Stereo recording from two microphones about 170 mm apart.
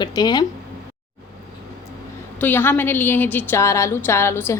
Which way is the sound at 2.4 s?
10° left (ahead or behind).